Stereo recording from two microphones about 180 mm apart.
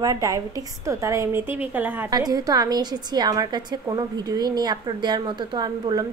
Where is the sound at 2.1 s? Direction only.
20° right (ahead or behind).